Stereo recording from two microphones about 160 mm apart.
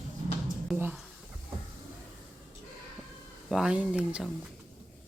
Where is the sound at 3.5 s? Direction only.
5° right (ahead or behind).